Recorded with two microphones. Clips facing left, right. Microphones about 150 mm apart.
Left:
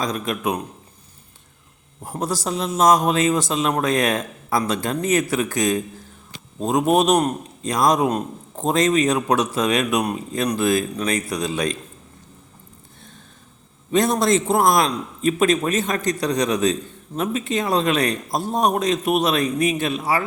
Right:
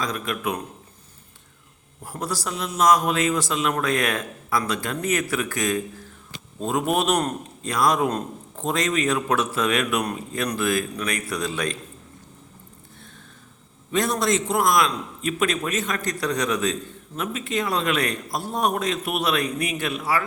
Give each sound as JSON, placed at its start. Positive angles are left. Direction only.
{"t": 0.0, "sound": "a man's voice", "side_deg": 20}
{"t": 2.0, "sound": "a man's voice", "side_deg": 20}
{"t": 13.9, "sound": "a man's voice", "side_deg": 25}